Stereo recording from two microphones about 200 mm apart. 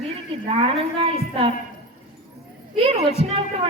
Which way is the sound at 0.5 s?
30° right (ahead or behind).